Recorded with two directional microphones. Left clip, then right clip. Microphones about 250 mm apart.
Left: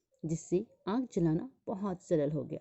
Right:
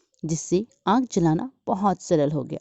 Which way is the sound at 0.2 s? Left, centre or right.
Right.